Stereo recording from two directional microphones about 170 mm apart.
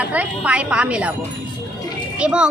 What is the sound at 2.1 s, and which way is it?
Speech, 5° right (ahead or behind).